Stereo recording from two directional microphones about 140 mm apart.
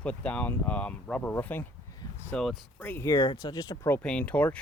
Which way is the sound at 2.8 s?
15° left (ahead or behind).